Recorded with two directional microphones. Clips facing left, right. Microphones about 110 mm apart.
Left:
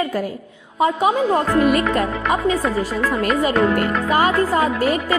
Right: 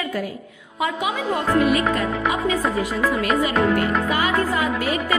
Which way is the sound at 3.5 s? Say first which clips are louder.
Left 2 dB; 45° left (ahead or behind).